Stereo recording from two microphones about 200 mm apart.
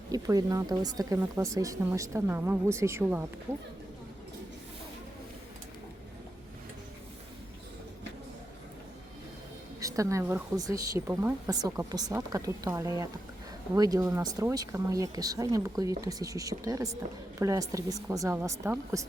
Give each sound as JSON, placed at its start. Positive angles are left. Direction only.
{"t": 0.1, "sound": "speech", "side_deg": -15}
{"t": 9.8, "sound": "speech", "side_deg": -15}